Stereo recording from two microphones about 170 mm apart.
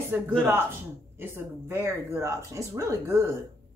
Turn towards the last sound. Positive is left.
turn(degrees=-15)  # may be behind; listen again after turning